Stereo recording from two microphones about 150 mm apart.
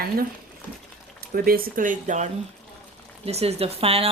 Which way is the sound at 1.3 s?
80° right.